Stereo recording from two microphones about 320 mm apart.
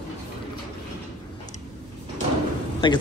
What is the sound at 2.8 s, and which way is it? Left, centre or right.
Speech, centre.